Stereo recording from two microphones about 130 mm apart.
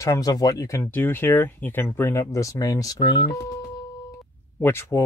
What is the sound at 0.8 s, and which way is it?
Speech, 15° left (ahead or behind).